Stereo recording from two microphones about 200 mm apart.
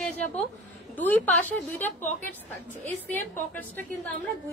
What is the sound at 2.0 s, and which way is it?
Speech, 40° left (ahead or behind).